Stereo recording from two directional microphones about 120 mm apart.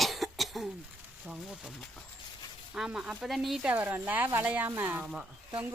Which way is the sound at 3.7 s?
15° right (ahead or behind).